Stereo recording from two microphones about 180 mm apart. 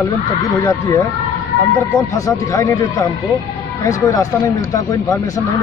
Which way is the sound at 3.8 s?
20° left (ahead or behind).